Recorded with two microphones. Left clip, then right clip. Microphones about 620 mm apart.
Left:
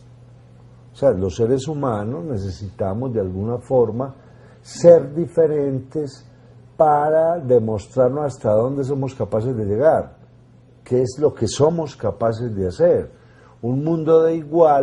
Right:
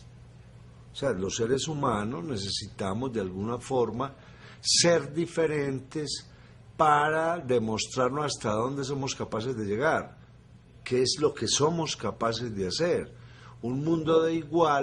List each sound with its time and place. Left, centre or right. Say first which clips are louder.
0.9 s speech: left 11 dB; left